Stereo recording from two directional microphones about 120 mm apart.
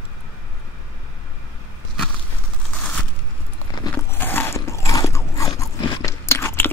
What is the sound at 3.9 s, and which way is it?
Biting, 20° left (ahead or behind).